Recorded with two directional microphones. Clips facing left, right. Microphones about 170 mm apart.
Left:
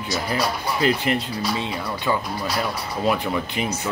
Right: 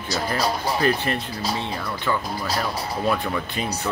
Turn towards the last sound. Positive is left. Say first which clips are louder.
# left 2 dB
turn(degrees=15)  # may be behind; listen again after turning